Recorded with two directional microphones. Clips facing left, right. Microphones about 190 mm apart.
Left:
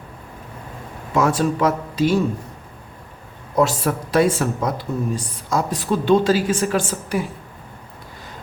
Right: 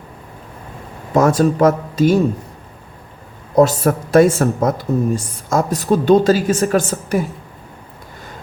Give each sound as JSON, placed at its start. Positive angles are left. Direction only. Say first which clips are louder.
{"t": 1.1, "sound": "speech", "louder": "right 5 dB", "side_deg": -40}
{"t": 3.5, "sound": "speech", "louder": "right 6 dB", "side_deg": -40}